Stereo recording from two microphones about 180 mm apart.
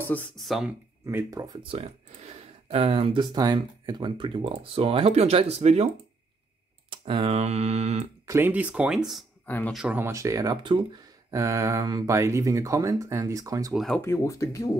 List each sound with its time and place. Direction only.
0.0 s speech: 10° left (ahead or behind)
1.0 s speech: 20° right (ahead or behind); by 5.9 s 35° right (ahead or behind)
6.9 s speech: 30° right (ahead or behind)
8.3 s speech: 10° right (ahead or behind)
9.5 s speech: 10° left (ahead or behind)
9.8 s speech: 10° right (ahead or behind)
13.7 s speech: 5° left (ahead or behind)
14.0 s speech: 15° left (ahead or behind)